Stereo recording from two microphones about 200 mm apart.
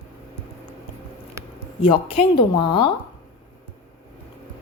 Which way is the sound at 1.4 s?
15° right (ahead or behind).